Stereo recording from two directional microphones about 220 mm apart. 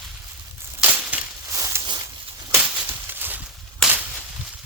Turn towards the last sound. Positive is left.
turn(degrees=-5)  # may be behind; listen again after turning